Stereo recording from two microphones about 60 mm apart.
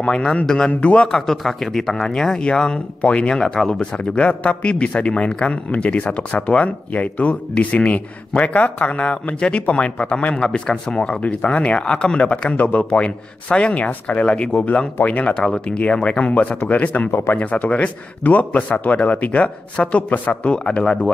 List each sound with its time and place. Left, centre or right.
0.0 s a man's voice: centre